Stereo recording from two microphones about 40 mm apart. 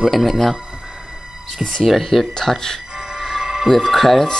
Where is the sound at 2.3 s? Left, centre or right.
Centre.